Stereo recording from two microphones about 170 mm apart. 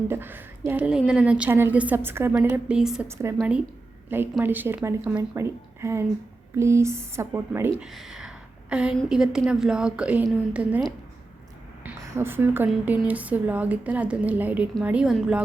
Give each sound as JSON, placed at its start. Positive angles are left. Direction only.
{"t": 0.1, "sound": "a woman's voice", "side_deg": -10}
{"t": 3.1, "sound": "a woman's voice", "side_deg": -15}
{"t": 7.9, "sound": "a woman's voice", "side_deg": 0}